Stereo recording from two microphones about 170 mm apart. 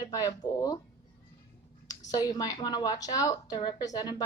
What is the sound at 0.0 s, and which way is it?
Speech, 20° left (ahead or behind).